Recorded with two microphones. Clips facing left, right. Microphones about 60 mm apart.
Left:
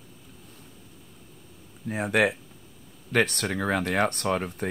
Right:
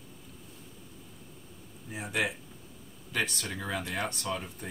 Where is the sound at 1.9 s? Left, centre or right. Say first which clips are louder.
Left 9 dB; left.